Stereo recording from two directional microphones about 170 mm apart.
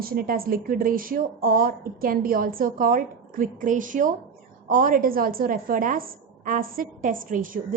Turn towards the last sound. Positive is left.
turn(degrees=-55)  # may be behind; listen again after turning